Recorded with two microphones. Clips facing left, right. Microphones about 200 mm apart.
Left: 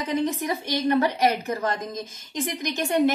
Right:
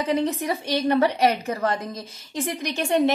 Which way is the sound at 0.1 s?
30° right (ahead or behind).